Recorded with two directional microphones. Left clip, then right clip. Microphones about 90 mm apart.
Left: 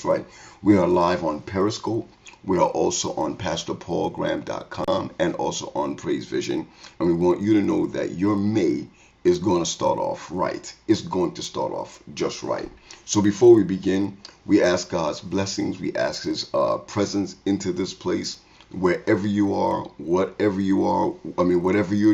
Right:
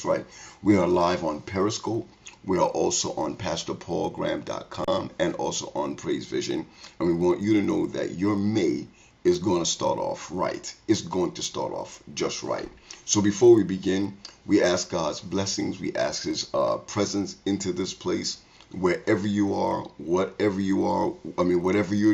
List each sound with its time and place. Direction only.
0.7 s speech: 25° right (ahead or behind)
2.4 s speech: 15° right (ahead or behind)